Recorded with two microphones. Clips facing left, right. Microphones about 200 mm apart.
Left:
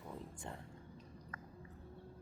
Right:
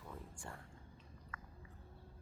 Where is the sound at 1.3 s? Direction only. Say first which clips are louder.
Even; 40° left (ahead or behind).